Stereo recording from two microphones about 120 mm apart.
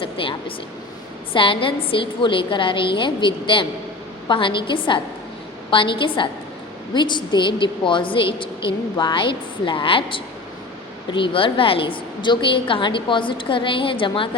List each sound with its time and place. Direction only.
0.0 s a woman's voice: 45° left (ahead or behind)